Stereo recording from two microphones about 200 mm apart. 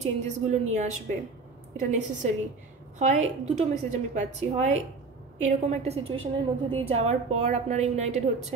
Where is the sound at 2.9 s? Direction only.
35° right (ahead or behind).